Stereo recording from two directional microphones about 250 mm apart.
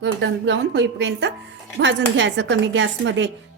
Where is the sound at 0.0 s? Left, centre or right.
Right.